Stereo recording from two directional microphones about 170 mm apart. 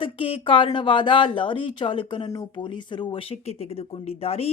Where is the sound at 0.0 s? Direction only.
30° left (ahead or behind).